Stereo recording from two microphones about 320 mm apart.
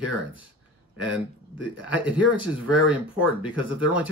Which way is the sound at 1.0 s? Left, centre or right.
Right.